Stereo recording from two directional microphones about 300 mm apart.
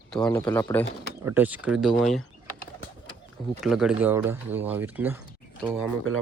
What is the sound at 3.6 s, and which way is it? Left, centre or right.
Speech, centre.